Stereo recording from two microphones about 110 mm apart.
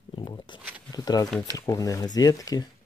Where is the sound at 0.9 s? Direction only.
35° left (ahead or behind).